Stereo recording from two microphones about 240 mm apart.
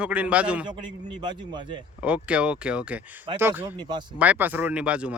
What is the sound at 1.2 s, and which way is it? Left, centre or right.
Speech, centre.